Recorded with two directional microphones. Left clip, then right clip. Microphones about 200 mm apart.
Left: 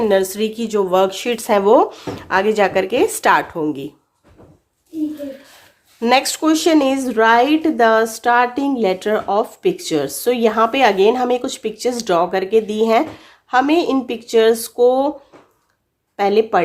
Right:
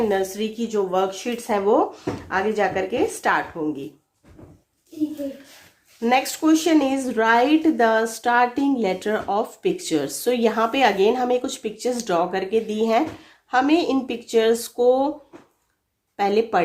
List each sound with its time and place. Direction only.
0.0 s speech: 45° left (ahead or behind)
6.0 s speech: 40° left (ahead or behind)
16.1 s speech: 30° left (ahead or behind)